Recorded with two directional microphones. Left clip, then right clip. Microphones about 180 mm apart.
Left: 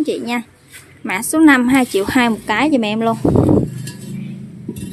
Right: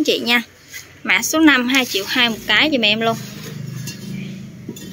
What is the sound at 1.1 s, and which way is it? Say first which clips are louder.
A woman's voice: left 1 dB; 25° left (ahead or behind).